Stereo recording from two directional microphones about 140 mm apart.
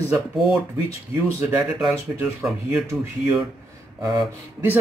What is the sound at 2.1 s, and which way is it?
Speech, 15° right (ahead or behind).